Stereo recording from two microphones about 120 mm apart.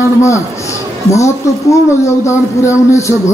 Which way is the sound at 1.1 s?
25° left (ahead or behind).